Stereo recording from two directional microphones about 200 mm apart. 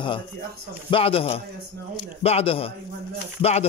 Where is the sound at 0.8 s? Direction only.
25° left (ahead or behind).